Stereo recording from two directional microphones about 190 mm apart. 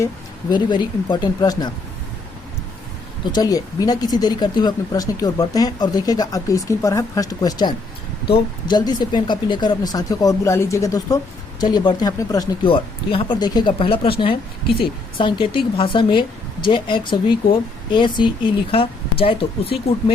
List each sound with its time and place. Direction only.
0.5 s speech: 25° left (ahead or behind)
3.3 s speech: 20° left (ahead or behind)